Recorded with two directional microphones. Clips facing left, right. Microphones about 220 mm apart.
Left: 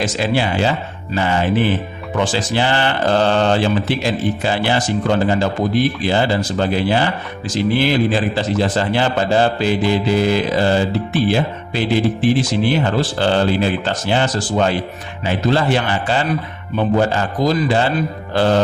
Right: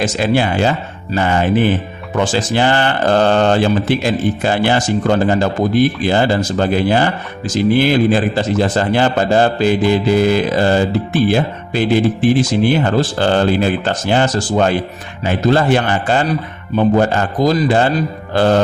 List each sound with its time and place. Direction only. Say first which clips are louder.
0.0 s speech: right 3 dB; 50° right (ahead or behind)